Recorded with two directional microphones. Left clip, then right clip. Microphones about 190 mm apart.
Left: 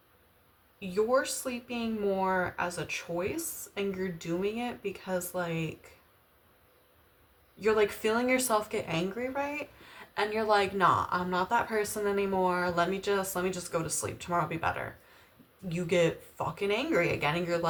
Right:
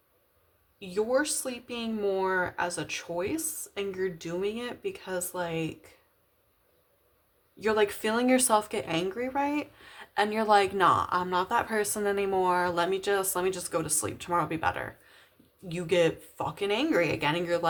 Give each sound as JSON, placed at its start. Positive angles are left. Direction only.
{"t": 0.8, "sound": "a woman's voice", "side_deg": -40}
{"t": 7.6, "sound": "a woman's voice", "side_deg": -45}